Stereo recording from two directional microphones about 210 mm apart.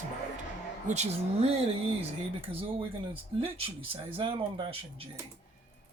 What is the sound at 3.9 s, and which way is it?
Speech, 25° right (ahead or behind).